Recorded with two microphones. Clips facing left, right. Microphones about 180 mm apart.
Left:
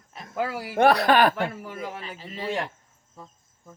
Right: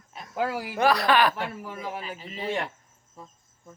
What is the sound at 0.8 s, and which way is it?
Speech, 55° left (ahead or behind).